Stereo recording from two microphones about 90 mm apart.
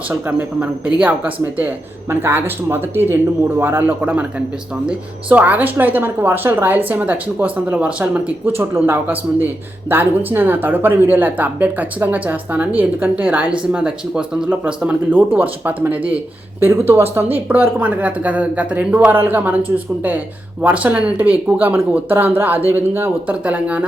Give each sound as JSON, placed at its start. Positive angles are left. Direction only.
{"t": 0.1, "sound": "speech", "side_deg": -20}